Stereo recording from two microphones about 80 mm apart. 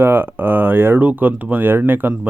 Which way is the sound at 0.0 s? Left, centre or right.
Right.